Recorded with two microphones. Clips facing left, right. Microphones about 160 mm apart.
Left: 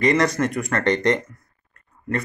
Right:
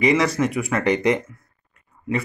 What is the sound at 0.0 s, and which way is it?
A man's voice, 5° right (ahead or behind).